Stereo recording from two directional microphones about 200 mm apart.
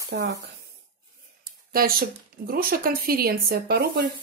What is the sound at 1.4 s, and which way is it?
Speech, 45° right (ahead or behind).